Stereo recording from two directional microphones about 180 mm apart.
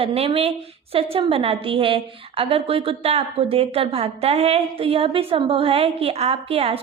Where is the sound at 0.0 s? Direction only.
30° right (ahead or behind).